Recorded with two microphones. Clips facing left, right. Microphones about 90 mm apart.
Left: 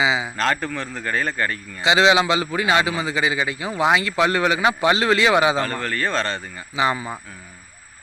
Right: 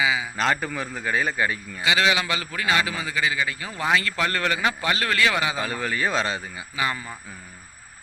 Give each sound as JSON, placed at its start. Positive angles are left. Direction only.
{"t": 0.0, "sound": "a man's voice", "side_deg": 25}
{"t": 0.3, "sound": "a man's voice", "side_deg": -5}
{"t": 1.8, "sound": "a man's voice", "side_deg": 25}
{"t": 5.5, "sound": "a man's voice", "side_deg": -10}
{"t": 6.7, "sound": "a man's voice", "side_deg": 20}